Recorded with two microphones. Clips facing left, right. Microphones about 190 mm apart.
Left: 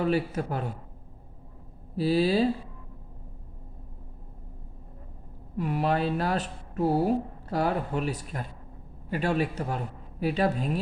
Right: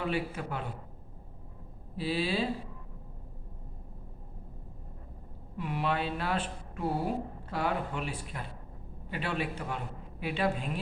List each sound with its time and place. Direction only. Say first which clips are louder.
0.0 s a man's voice: left 6 dB; 40° left (ahead or behind)
2.0 s a man's voice: left 8 dB; 40° left (ahead or behind)
5.5 s a man's voice: left 5 dB; 40° left (ahead or behind)